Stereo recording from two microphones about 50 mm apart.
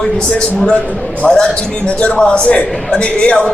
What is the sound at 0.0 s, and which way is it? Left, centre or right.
A man's voice, centre.